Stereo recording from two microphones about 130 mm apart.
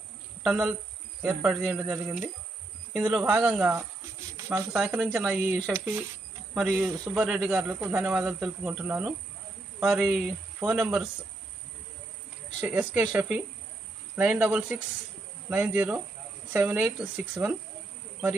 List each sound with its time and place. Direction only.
0.4 s a man's voice: 5° right (ahead or behind)
5.7 s speech: 20° right (ahead or behind)
6.5 s speech: centre (ahead or behind)
12.5 s speech: 10° right (ahead or behind)